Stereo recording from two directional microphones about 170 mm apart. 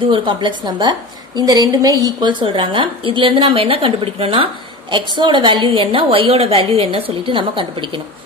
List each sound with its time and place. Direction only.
0.0 s a woman's voice: 30° right (ahead or behind)